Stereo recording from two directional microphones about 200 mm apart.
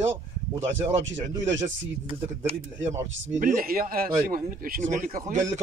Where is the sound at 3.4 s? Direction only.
45° right (ahead or behind).